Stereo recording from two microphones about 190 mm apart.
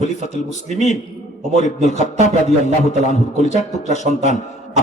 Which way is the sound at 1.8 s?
40° left (ahead or behind).